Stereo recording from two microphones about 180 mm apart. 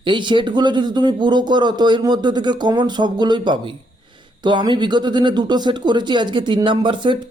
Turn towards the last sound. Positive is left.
turn(degrees=-25)  # may be behind; listen again after turning